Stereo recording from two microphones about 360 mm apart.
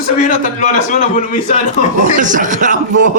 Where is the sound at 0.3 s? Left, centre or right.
Left.